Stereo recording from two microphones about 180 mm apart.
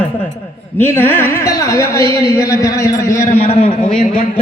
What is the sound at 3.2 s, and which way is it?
Speech, 35° left (ahead or behind).